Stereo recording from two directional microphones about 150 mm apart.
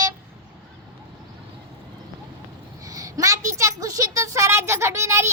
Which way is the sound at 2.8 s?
20° right (ahead or behind).